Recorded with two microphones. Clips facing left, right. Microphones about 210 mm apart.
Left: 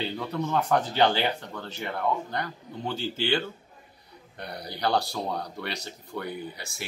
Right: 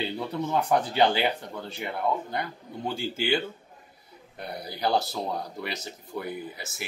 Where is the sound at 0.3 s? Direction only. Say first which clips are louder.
Even; 15° right (ahead or behind).